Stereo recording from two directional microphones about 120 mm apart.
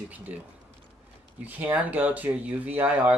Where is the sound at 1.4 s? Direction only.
15° right (ahead or behind).